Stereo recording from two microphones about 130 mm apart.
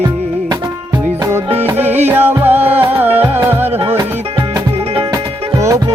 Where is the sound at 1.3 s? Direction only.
15° right (ahead or behind).